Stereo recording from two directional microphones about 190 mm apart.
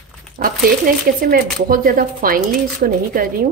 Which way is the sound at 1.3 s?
50° right (ahead or behind).